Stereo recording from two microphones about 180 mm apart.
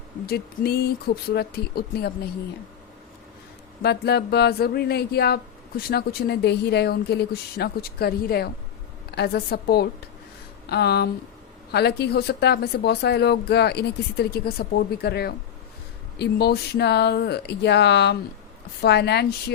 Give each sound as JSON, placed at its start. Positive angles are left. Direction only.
{"t": 0.3, "sound": "speech", "side_deg": 60}
{"t": 3.8, "sound": "speech", "side_deg": 65}